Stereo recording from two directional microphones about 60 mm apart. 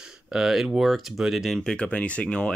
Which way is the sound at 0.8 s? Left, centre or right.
Centre.